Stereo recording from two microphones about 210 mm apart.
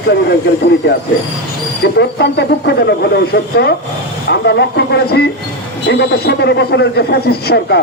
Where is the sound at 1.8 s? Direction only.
50° left (ahead or behind).